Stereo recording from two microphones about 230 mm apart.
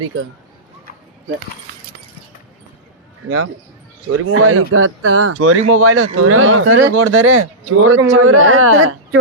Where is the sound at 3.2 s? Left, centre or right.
Right.